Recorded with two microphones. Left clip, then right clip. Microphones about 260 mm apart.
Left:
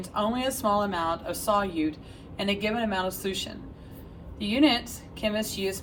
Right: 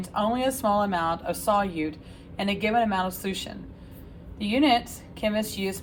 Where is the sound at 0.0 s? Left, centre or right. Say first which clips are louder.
Right 2 dB; right.